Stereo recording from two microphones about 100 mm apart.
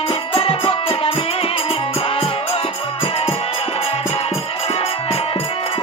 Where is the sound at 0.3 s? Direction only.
70° left (ahead or behind).